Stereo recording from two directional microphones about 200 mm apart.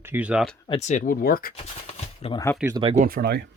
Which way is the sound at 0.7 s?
35° left (ahead or behind).